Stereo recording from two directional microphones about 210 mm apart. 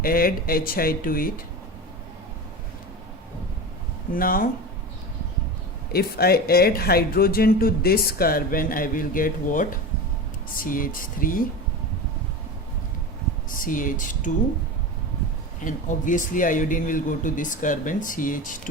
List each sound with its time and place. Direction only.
0.0 s speech: 45° left (ahead or behind)
4.1 s speech: 45° left (ahead or behind)
5.9 s speech: 50° left (ahead or behind)
13.5 s speech: 40° left (ahead or behind)
15.6 s speech: 40° left (ahead or behind)